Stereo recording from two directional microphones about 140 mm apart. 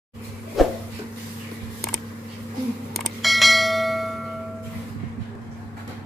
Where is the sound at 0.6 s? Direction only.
Centre (ahead or behind).